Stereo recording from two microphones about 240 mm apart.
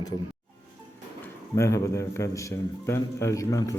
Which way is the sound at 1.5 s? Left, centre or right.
Centre.